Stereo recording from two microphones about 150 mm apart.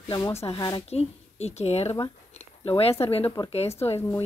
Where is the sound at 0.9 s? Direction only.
45° left (ahead or behind).